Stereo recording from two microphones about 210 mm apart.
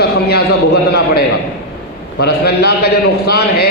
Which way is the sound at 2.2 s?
50° left (ahead or behind).